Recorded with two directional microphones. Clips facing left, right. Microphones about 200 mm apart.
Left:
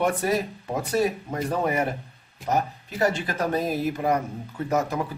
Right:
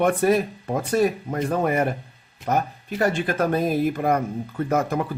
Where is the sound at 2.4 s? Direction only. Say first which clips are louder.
Right 2 dB; 55° right (ahead or behind).